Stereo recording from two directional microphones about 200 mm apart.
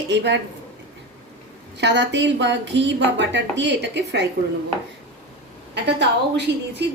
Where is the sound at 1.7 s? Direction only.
60° right (ahead or behind).